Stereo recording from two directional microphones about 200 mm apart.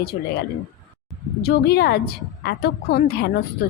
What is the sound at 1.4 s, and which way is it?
A woman's voice, 55° left (ahead or behind).